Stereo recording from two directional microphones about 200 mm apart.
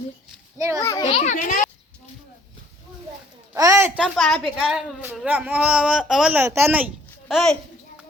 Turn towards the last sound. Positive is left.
turn(degrees=0)  # may be behind; listen again after turning